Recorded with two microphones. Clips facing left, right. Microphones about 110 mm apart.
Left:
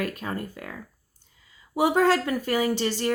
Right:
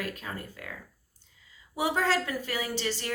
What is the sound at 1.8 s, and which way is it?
Speech, 50° left (ahead or behind).